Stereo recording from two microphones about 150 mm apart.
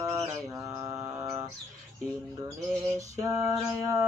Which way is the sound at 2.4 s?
20° right (ahead or behind).